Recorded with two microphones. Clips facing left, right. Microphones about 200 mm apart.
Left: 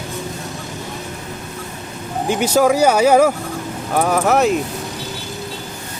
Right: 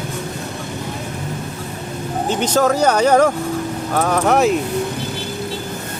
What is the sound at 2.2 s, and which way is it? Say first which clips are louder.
Speech: left 2 dB; 10° left (ahead or behind).